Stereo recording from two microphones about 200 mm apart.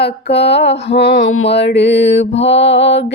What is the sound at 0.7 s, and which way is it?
Music, 30° left (ahead or behind).